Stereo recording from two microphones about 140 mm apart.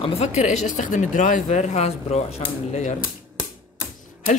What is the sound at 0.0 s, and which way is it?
Speech, 50° left (ahead or behind).